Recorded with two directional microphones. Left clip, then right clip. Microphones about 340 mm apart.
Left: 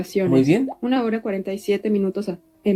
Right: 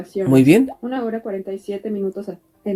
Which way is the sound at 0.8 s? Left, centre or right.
Left.